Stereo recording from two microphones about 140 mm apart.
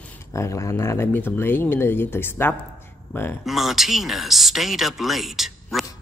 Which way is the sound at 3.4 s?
Centre (ahead or behind).